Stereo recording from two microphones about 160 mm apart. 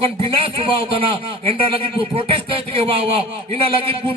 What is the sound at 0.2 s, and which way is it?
Speech, 35° right (ahead or behind).